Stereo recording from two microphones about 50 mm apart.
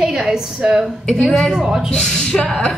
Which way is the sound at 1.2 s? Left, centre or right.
Centre.